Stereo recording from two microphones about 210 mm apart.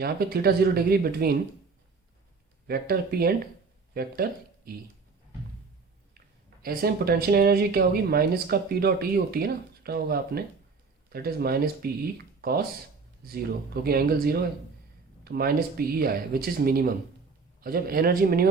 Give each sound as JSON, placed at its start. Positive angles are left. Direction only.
{"t": 0.0, "sound": "speech", "side_deg": -45}
{"t": 2.6, "sound": "speech", "side_deg": -45}
{"t": 6.1, "sound": "speech", "side_deg": -45}